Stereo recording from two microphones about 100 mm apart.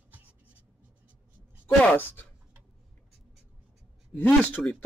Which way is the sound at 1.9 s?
20° left (ahead or behind).